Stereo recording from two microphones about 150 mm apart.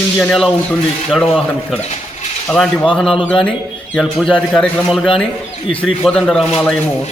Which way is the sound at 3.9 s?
Centre (ahead or behind).